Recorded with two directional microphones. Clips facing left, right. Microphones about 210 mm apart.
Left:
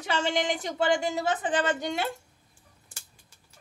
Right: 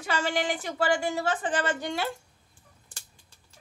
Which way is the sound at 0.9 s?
20° left (ahead or behind).